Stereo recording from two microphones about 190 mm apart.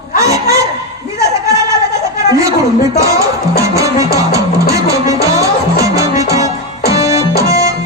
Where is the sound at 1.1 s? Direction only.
15° right (ahead or behind).